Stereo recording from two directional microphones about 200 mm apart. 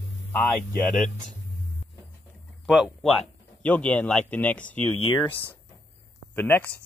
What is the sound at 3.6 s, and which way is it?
Speech, 5° left (ahead or behind).